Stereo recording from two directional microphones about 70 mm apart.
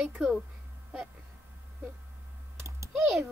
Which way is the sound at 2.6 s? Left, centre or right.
Right.